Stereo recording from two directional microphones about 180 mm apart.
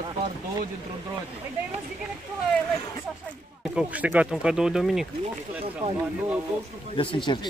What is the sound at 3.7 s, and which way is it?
Speech, 10° right (ahead or behind).